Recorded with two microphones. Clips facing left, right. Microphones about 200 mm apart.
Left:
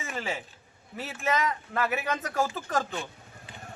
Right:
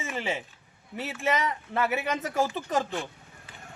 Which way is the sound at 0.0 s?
20° right (ahead or behind).